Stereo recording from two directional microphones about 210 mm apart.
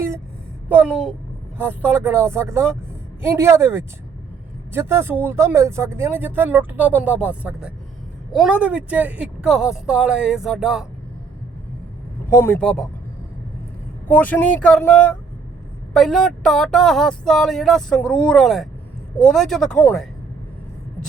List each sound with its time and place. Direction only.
0.8 s speech: 5° right (ahead or behind)
12.3 s speech: 10° left (ahead or behind)
14.1 s speech: 10° left (ahead or behind)